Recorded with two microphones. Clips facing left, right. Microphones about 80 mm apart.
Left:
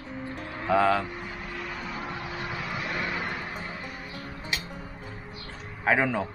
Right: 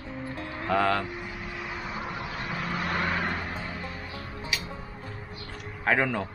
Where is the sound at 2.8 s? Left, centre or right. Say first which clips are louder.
Right 4 dB; right.